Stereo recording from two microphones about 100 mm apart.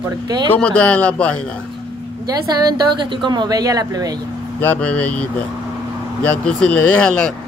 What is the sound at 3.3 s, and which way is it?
Speech, 45° right (ahead or behind).